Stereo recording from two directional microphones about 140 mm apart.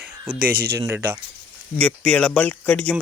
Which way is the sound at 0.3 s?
90° right.